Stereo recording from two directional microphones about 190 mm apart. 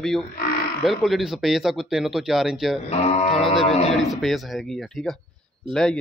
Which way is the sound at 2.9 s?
35° left (ahead or behind).